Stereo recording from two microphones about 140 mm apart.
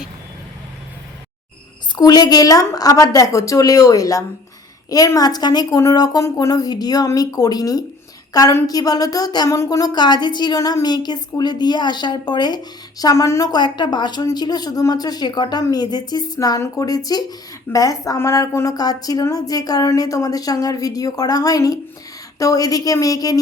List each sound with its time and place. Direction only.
2.0 s a woman's voice: 30° left (ahead or behind)